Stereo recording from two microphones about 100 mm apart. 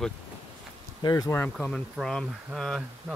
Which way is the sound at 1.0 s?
40° left (ahead or behind).